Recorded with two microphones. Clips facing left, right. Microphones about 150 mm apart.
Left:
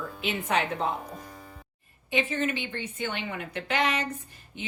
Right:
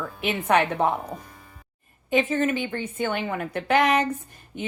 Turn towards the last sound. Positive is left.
turn(degrees=-50)  # may be behind; listen again after turning